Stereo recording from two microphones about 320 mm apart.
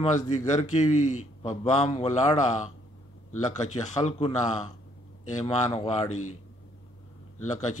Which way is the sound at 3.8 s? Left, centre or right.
Left.